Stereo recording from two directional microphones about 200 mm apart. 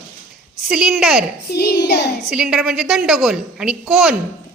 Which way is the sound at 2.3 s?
5° right (ahead or behind).